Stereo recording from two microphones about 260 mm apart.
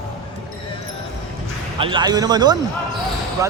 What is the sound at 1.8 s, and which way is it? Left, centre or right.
Speech, centre.